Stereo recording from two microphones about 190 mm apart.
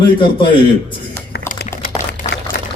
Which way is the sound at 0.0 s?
25° left (ahead or behind).